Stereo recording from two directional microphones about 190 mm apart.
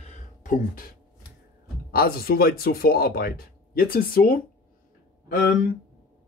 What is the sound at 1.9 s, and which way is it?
Speech, 50° left (ahead or behind).